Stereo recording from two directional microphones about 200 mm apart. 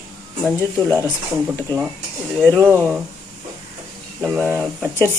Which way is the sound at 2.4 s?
10° left (ahead or behind).